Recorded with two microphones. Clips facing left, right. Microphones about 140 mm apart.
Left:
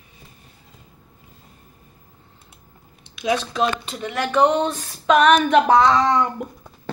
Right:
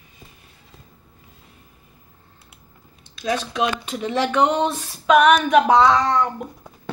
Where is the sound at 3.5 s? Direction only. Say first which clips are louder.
Left 1 dB; 10° right (ahead or behind).